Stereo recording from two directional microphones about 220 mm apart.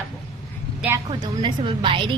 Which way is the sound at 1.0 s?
20° right (ahead or behind).